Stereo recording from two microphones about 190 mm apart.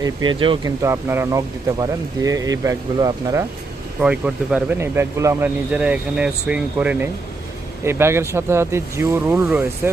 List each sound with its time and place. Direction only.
0.0 s speech: 25° right (ahead or behind)
4.0 s speech: 5° right (ahead or behind)